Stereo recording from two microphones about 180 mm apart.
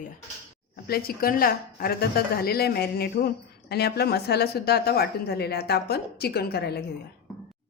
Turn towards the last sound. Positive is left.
turn(degrees=65)  # may be behind; listen again after turning